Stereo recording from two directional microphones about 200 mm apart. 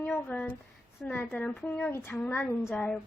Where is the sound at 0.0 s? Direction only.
10° left (ahead or behind).